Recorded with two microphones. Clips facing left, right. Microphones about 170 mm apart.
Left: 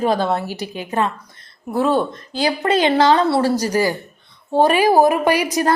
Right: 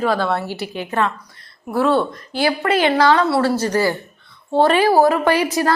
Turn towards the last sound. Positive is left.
turn(degrees=15)  # may be behind; listen again after turning